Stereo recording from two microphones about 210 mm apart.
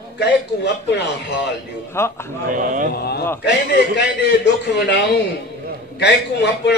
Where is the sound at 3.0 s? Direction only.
50° left (ahead or behind).